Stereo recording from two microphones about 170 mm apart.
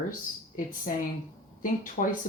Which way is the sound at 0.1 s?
55° left (ahead or behind).